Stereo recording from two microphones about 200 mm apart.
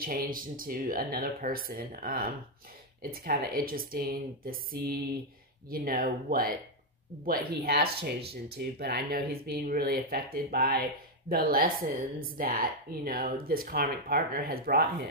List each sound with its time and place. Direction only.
0.0 s speech: 45° right (ahead or behind)